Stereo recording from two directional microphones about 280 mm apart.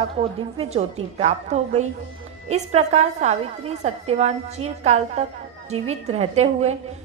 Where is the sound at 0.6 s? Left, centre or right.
Right.